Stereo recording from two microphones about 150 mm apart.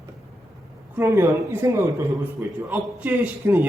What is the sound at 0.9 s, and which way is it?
A man's voice, 15° right (ahead or behind).